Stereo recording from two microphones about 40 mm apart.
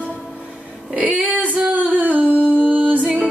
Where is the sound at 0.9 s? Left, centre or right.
Right.